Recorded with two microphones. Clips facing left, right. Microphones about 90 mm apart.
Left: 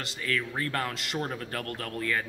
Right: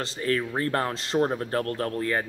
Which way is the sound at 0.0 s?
30° right (ahead or behind).